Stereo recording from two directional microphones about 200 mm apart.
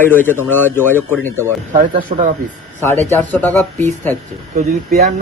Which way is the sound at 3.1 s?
10° left (ahead or behind).